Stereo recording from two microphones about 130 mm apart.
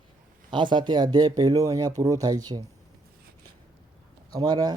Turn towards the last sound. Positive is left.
turn(degrees=-30)  # may be behind; listen again after turning